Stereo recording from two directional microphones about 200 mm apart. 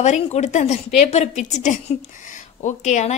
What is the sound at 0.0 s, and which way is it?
A woman's voice, 35° left (ahead or behind).